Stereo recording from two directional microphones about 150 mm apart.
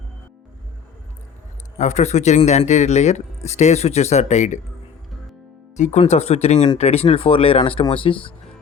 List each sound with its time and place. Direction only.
1.8 s speech: 50° left (ahead or behind)
5.7 s speech: 50° left (ahead or behind)